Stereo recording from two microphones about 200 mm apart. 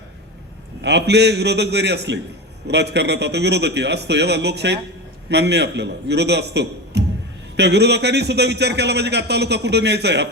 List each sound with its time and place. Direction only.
0.8 s a man's voice: 60° right (ahead or behind)